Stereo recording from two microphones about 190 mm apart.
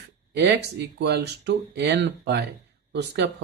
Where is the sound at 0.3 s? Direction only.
65° right (ahead or behind).